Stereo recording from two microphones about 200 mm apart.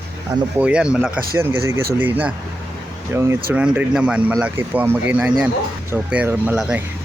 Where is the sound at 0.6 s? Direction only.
5° right (ahead or behind).